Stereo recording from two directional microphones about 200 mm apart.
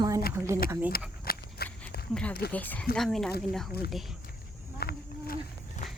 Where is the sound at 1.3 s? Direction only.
50° left (ahead or behind).